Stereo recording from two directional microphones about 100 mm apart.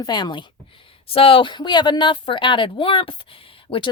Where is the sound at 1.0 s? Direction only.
70° left (ahead or behind).